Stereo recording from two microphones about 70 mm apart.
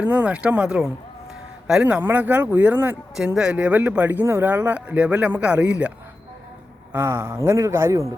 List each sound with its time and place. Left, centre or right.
0.0 s speech: centre
1.8 s speech: right
3.2 s speech: centre
6.9 s a man's voice: right